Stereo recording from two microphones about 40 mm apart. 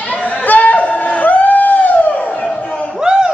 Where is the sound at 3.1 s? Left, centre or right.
Right.